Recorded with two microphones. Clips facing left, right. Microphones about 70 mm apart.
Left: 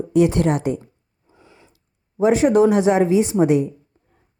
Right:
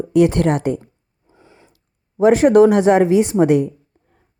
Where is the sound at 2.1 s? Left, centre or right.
Right.